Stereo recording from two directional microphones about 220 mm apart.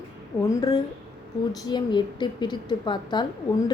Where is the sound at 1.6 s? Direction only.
20° left (ahead or behind).